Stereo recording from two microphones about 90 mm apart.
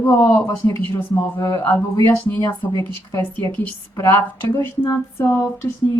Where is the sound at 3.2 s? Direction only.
20° left (ahead or behind).